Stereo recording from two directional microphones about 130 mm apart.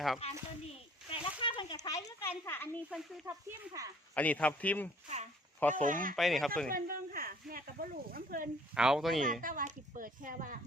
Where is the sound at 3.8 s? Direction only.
25° right (ahead or behind).